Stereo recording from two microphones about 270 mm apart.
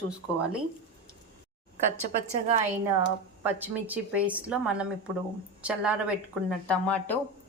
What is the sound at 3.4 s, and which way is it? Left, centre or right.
A woman's voice, centre.